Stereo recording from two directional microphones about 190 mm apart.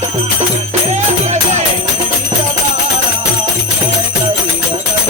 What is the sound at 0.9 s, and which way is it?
Music, 35° right (ahead or behind).